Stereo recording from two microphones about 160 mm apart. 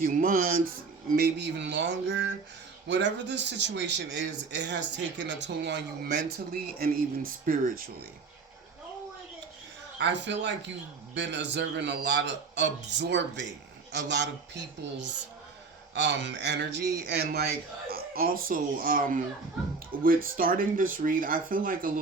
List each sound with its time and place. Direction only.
0.0 s a man's voice: 65° right (ahead or behind)
10.0 s speech: 90° right; by 21.9 s 60° right (ahead or behind)